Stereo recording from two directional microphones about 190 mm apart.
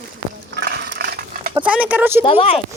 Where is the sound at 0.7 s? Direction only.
55° right (ahead or behind).